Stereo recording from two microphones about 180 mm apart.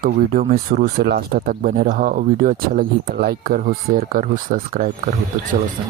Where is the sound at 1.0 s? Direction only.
60° right (ahead or behind).